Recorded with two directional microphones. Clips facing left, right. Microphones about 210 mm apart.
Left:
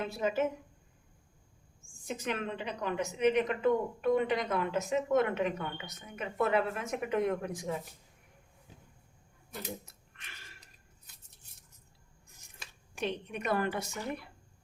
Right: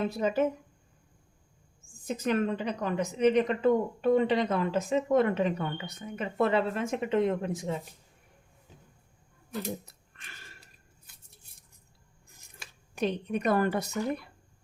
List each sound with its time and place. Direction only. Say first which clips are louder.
0.2 s speech: right 2 dB; 35° right (ahead or behind)
2.0 s speech: right 7 dB; 40° right (ahead or behind)
13.0 s speech: right 6 dB; 35° right (ahead or behind)